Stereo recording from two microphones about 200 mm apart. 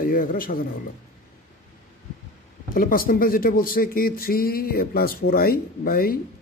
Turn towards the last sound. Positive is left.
turn(degrees=45)  # may be behind; listen again after turning